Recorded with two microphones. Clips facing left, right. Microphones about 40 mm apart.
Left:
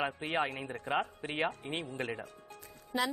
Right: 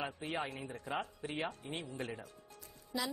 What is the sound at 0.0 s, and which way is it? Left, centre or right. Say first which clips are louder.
Speech: left 6 dB; left.